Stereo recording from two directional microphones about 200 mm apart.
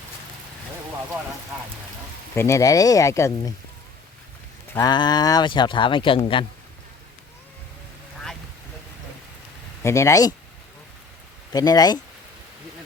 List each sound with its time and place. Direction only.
2.3 s speech: 15° left (ahead or behind)
4.7 s speech: 20° left (ahead or behind)
9.8 s speech: 15° left (ahead or behind)
11.5 s speech: 20° left (ahead or behind)